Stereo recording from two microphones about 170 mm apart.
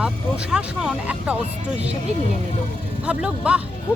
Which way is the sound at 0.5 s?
5° right (ahead or behind).